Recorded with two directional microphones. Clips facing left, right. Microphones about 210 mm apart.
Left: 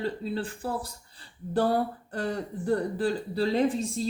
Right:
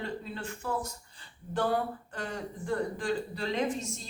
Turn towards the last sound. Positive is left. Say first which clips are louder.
# left 6 dB
turn(degrees=35)  # may be behind; listen again after turning